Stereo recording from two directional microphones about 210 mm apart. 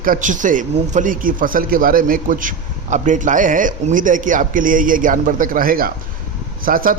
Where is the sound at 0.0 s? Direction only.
40° right (ahead or behind).